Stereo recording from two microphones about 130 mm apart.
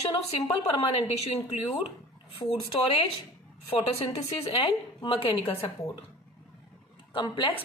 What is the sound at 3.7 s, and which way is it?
A woman's voice, 45° left (ahead or behind).